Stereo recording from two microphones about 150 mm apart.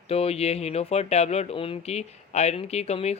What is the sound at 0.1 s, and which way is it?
Speech, 40° left (ahead or behind).